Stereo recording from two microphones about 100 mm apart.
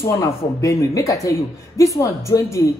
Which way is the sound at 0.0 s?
30° left (ahead or behind).